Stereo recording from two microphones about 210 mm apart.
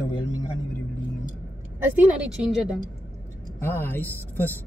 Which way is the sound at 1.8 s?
5° right (ahead or behind).